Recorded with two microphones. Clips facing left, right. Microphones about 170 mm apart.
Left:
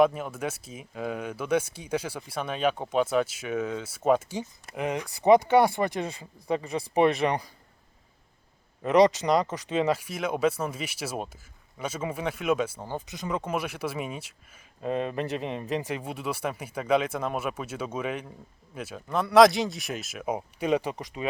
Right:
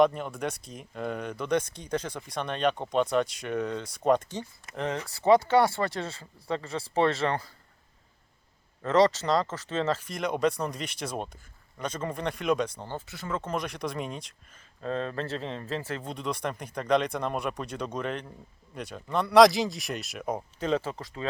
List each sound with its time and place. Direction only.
0.0 s speech: 5° left (ahead or behind)
8.8 s speech: 15° left (ahead or behind)